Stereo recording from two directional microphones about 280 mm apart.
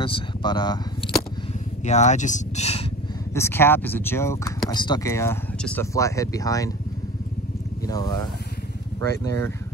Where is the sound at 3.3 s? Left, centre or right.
Centre.